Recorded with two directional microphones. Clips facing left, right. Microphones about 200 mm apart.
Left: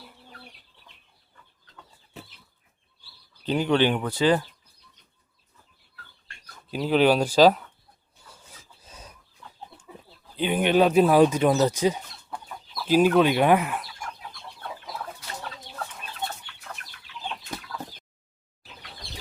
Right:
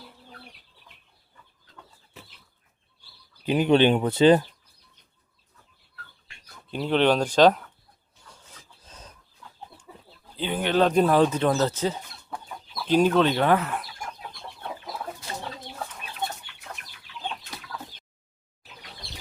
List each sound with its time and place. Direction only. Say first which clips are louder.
3.4 s speech: right 3 dB; 15° right (ahead or behind)
6.2 s speech: even; 5° left (ahead or behind)
8.2 s rub: even; 5° left (ahead or behind)
10.3 s speech: left 3 dB; 15° left (ahead or behind)